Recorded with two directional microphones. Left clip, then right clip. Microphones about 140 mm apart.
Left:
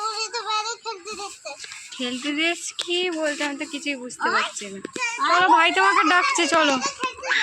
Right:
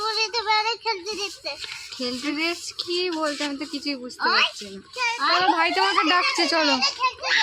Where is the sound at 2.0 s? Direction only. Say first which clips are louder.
Left 2 dB; 10° right (ahead or behind).